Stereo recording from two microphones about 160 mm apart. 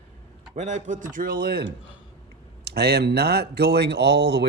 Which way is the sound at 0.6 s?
50° right (ahead or behind).